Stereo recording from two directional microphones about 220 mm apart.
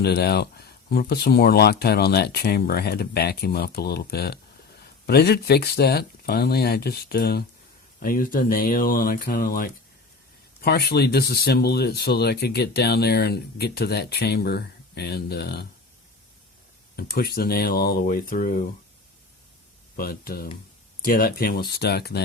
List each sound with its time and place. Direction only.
0.0 s speech: 45° left (ahead or behind)
17.0 s speech: 45° left (ahead or behind)
20.0 s speech: 45° left (ahead or behind)